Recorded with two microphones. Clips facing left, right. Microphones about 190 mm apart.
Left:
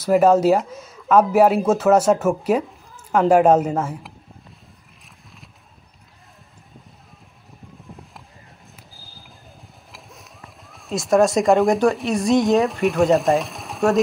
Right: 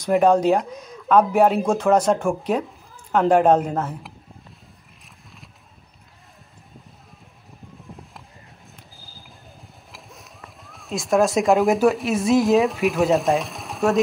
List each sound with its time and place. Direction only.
0.0 s speech: 5° left (ahead or behind)
7.9 s a sound: centre (ahead or behind)
9.6 s speech: centre (ahead or behind)